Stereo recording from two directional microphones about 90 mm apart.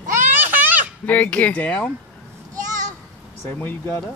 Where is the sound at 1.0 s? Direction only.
20° left (ahead or behind).